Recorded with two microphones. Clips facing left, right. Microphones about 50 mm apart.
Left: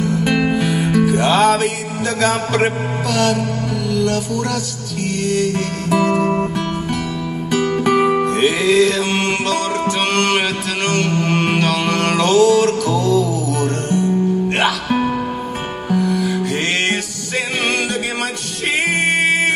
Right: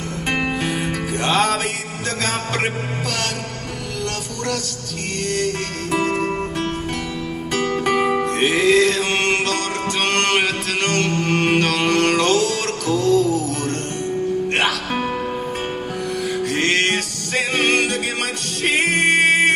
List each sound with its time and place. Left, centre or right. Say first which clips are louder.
0.0 s music: left 6 dB; right
1.3 s music: left 3 dB; left
3.1 s music: left 11 dB; right
5.9 s music: left 4 dB; right
7.5 s music: left 4 dB; right
11.2 s music: left 1 dB; left
11.5 s mantra: left 1 dB; right
11.9 s music: right 1 dB; left
12.2 s music: left 6 dB; right
19.0 s music: right 2 dB; right